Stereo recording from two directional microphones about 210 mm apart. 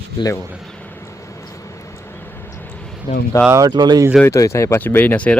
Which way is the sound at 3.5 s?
15° right (ahead or behind).